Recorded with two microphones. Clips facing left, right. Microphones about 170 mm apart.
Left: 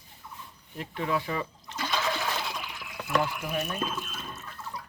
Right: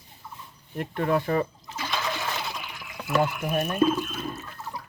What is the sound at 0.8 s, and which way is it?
Speech, 50° right (ahead or behind).